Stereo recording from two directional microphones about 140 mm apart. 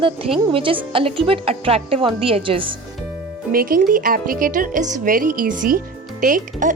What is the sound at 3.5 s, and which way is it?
Speech, 90° right.